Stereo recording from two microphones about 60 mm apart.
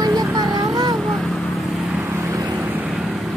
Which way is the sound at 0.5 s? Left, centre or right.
Right.